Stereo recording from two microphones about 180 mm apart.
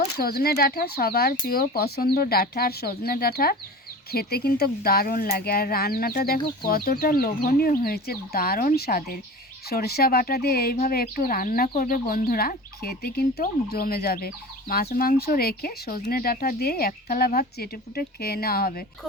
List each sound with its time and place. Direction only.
0.2 s speech: 60° left (ahead or behind)